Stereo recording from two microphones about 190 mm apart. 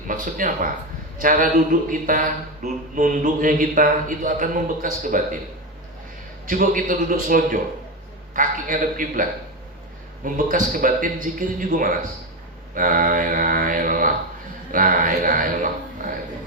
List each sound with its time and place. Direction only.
0.1 s speech: 45° right (ahead or behind)
6.5 s speech: 45° right (ahead or behind)
10.2 s speech: 45° right (ahead or behind)